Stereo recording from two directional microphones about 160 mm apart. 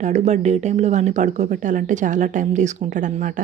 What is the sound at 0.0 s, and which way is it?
Speech, 45° right (ahead or behind).